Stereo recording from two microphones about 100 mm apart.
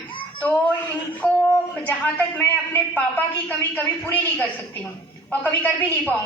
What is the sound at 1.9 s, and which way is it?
A woman's voice, 15° left (ahead or behind).